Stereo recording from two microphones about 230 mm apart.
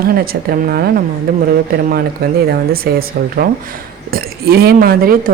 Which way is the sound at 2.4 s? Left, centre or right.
Right.